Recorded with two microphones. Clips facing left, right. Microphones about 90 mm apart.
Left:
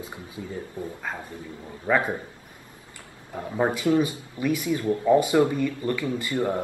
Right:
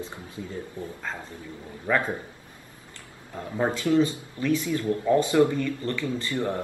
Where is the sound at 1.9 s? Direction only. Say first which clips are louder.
Left 2 dB; 15° left (ahead or behind).